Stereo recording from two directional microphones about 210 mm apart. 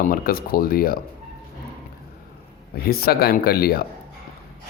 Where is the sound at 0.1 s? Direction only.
45° left (ahead or behind).